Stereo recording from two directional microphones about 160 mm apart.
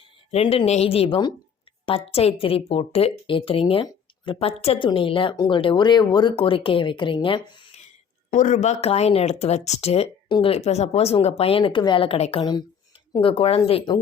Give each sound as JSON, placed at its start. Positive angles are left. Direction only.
{"t": 0.3, "sound": "speech", "side_deg": 40}
{"t": 8.3, "sound": "speech", "side_deg": 50}
{"t": 12.4, "sound": "a woman's voice", "side_deg": 30}